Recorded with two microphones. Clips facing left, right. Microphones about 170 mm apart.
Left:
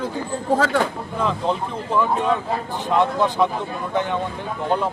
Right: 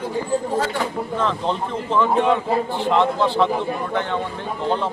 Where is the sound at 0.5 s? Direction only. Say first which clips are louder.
Left 3 dB; 90° left.